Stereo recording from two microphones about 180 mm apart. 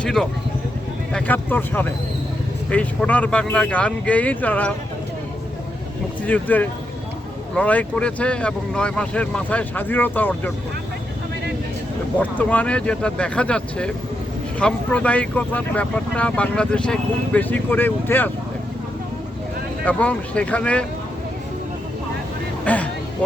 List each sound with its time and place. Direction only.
0.0 s speech: 5° left (ahead or behind)
6.2 s speech: 10° left (ahead or behind)
12.2 s speech: 10° left (ahead or behind)
19.8 s speech: 10° left (ahead or behind)
22.6 s vehicle: 10° left (ahead or behind)